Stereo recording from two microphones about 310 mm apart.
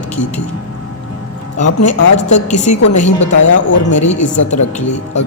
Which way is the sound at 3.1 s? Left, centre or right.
Left.